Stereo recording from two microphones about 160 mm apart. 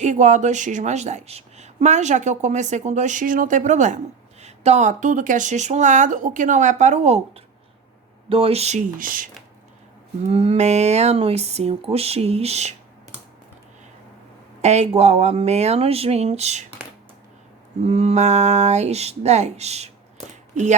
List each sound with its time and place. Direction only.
0.0 s speech: 50° right (ahead or behind)
9.0 s speech: 60° right (ahead or behind)
10.2 s speech: 40° right (ahead or behind)
14.6 s speech: 45° right (ahead or behind)
17.8 s speech: 40° right (ahead or behind)